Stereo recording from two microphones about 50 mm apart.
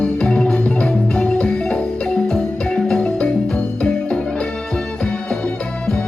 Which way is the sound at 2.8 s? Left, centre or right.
Centre.